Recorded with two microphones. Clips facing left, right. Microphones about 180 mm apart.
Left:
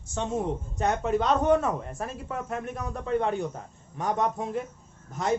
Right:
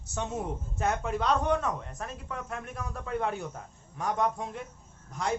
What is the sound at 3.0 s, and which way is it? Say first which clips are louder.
Speech: left 6 dB; 5° right (ahead or behind).